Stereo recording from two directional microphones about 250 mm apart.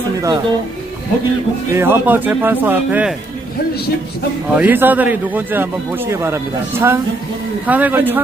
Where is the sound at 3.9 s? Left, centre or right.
Left.